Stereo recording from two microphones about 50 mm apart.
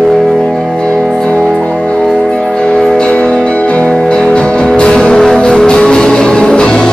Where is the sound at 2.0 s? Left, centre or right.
Centre.